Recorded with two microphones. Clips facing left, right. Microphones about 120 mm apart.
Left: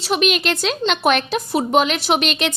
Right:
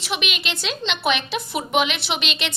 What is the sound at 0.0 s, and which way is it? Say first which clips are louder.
A woman's voice: left 9 dB; 40° left (ahead or behind).